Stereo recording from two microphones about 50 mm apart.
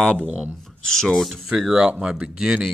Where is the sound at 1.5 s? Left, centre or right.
Centre.